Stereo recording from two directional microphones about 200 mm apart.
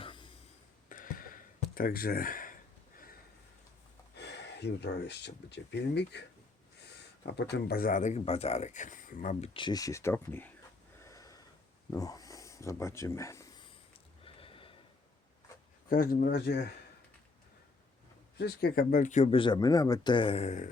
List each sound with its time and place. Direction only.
0.0 s a sound: 25° left (ahead or behind)
0.9 s a sound: 40° left (ahead or behind)
4.2 s speech: 55° left (ahead or behind); by 9.5 s 40° left (ahead or behind)
9.5 s speech: 25° left (ahead or behind)
11.0 s snort: 15° left (ahead or behind)
11.9 s a sound: 20° left (ahead or behind)
14.3 s snort: 25° left (ahead or behind)
15.9 s speech: 45° left (ahead or behind)
18.3 s speech: 50° left (ahead or behind); by 20.7 s 35° left (ahead or behind)